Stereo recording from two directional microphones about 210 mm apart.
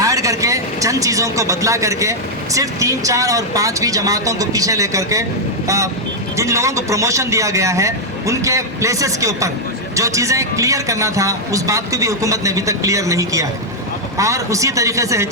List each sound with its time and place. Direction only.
0.0 s a man's voice: 15° right (ahead or behind)